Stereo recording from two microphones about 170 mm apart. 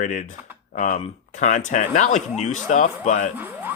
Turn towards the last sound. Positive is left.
turn(degrees=-10)  # may be behind; listen again after turning